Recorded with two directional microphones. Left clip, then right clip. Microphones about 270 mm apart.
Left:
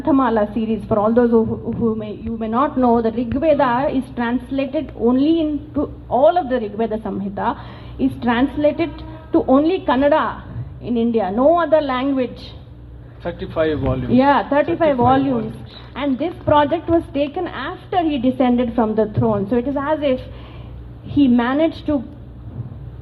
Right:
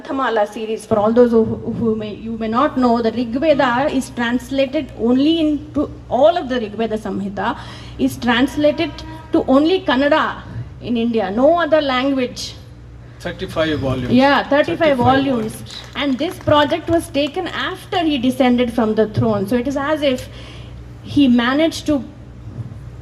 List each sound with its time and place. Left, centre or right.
0.0 s a woman's voice: right
21.2 s a woman's voice: right